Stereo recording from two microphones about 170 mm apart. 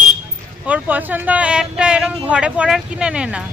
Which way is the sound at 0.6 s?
10° right (ahead or behind).